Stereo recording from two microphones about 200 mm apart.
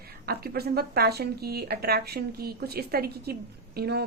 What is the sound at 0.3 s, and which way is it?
A woman's voice, 50° right (ahead or behind).